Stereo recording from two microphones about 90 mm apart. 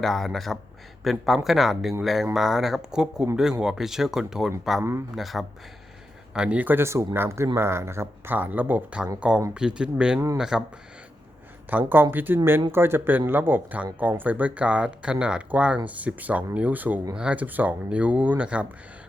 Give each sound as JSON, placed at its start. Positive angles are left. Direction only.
{"t": 0.0, "sound": "speech", "side_deg": 5}
{"t": 4.8, "sound": "a man's voice", "side_deg": -30}
{"t": 5.1, "sound": "speech", "side_deg": 0}
{"t": 6.3, "sound": "speech", "side_deg": -10}
{"t": 11.7, "sound": "speech", "side_deg": -20}